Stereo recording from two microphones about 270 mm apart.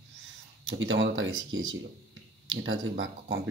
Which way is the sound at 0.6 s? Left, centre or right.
Right.